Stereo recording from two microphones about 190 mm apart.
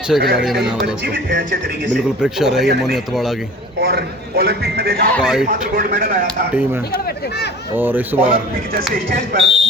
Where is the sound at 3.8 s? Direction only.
55° right (ahead or behind).